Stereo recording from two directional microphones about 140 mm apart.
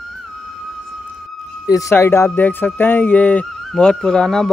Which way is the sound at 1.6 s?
25° left (ahead or behind).